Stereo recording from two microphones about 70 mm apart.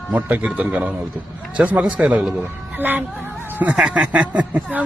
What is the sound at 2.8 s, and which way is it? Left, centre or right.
A woman's voice, right.